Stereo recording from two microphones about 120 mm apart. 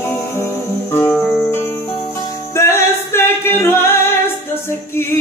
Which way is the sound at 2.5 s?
20° left (ahead or behind).